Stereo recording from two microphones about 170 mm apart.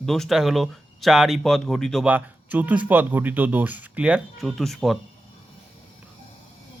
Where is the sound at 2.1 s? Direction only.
10° right (ahead or behind).